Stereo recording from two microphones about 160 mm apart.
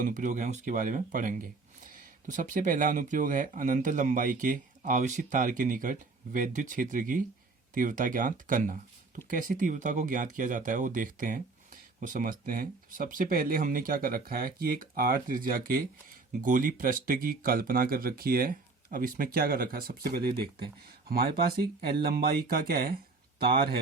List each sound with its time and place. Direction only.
0.0 s speech: 55° right (ahead or behind)